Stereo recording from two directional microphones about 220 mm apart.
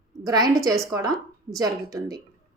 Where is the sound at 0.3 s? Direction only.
15° right (ahead or behind).